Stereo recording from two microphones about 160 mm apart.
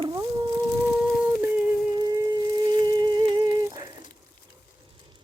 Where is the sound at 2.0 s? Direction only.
25° right (ahead or behind).